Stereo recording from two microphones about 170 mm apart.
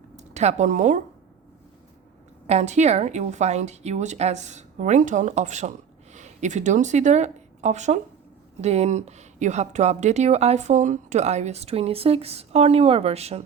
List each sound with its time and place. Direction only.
0.2 s speech: 40° right (ahead or behind)
2.5 s a woman's voice: 40° right (ahead or behind)